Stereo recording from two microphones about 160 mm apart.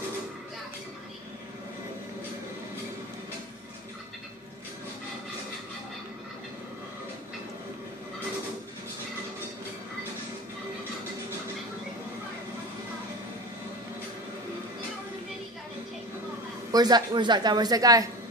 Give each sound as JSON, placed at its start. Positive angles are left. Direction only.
{"t": 16.7, "sound": "speech", "side_deg": -25}